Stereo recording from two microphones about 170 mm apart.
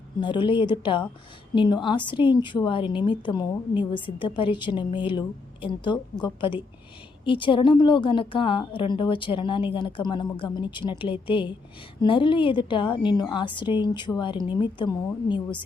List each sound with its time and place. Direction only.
0.2 s a woman's voice: 30° left (ahead or behind)